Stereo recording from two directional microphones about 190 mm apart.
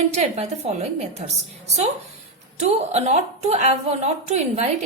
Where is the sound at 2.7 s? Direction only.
35° right (ahead or behind).